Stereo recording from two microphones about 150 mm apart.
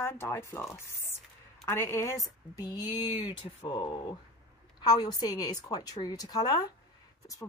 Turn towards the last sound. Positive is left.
turn(degrees=25)  # may be behind; listen again after turning